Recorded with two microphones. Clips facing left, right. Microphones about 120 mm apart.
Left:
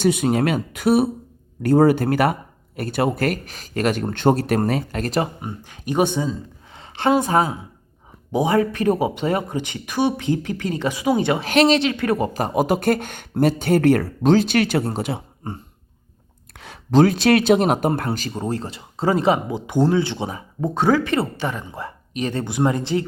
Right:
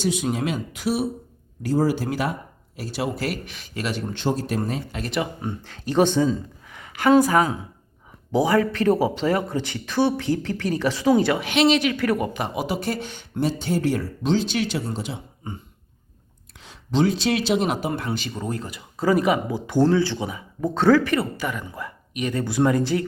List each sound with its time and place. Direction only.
0.0 s speech: 60° left (ahead or behind)
4.9 s speech: 40° left (ahead or behind)
5.4 s speech: 15° left (ahead or behind)
6.7 s a sound: 25° left (ahead or behind)
7.2 s speech: 25° left (ahead or behind)
11.3 s speech: 40° left (ahead or behind); by 15.2 s 60° left (ahead or behind)
16.6 s speech: 60° left (ahead or behind); by 20.2 s 20° left (ahead or behind)
20.2 s speech: 35° left (ahead or behind)
20.7 s speech: 15° left (ahead or behind); by 22.4 s 30° left (ahead or behind)
22.4 s speech: 20° left (ahead or behind)